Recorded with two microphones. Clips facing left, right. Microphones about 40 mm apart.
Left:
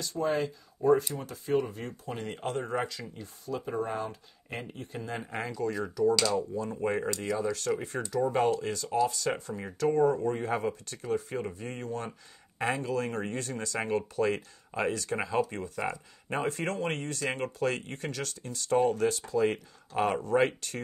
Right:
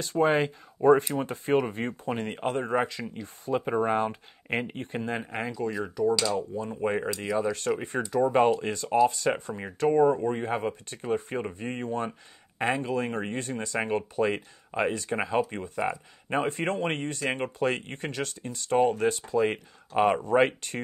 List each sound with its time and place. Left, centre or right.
0.0 s speech: right
1.7 s speech: right
3.5 s speech: right
5.1 s speech: centre
9.8 s speech: right